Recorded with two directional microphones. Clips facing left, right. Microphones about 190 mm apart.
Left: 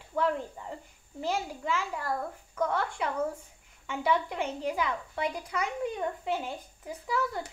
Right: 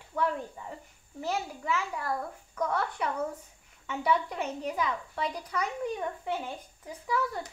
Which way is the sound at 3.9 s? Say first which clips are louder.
Even; 15° left (ahead or behind).